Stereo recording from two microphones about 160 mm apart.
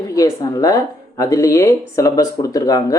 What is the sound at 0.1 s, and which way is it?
Speech, 20° left (ahead or behind).